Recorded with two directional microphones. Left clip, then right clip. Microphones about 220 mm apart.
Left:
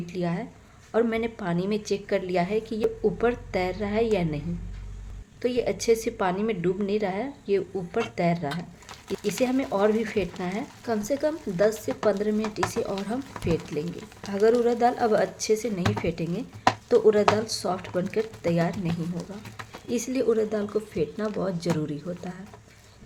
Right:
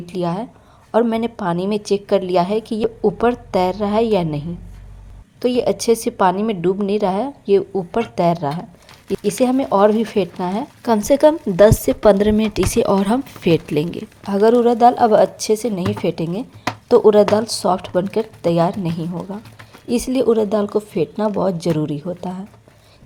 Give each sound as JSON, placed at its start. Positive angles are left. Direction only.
{"t": 0.0, "sound": "a woman's voice", "side_deg": -25}
{"t": 14.3, "sound": "a woman's voice", "side_deg": -25}